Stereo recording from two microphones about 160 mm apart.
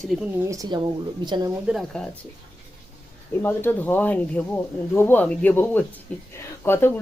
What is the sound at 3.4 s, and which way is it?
Speech, 15° left (ahead or behind).